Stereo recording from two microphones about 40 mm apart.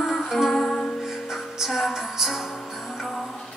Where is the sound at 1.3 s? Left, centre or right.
Centre.